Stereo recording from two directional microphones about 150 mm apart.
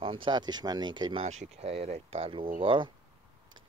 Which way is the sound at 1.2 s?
50° right (ahead or behind).